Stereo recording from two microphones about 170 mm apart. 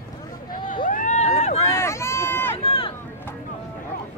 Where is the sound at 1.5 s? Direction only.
15° left (ahead or behind).